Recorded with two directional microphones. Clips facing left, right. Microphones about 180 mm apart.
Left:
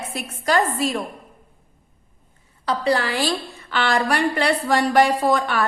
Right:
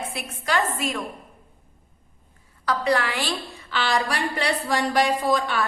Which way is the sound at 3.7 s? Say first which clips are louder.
Left 4 dB; 55° left (ahead or behind).